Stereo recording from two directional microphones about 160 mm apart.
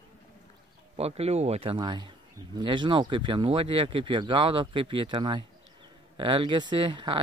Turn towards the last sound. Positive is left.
turn(degrees=-30)  # may be behind; listen again after turning